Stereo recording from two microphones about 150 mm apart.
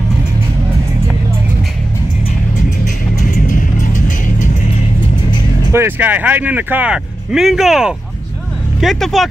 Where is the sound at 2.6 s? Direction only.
60° left (ahead or behind).